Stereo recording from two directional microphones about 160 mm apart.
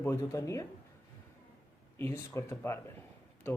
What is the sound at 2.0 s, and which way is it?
Speech, 15° left (ahead or behind).